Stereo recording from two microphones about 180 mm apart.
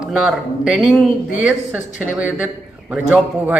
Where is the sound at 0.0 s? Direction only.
5° right (ahead or behind).